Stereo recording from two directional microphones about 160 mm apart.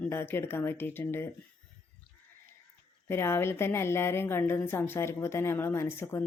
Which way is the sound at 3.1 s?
15° left (ahead or behind).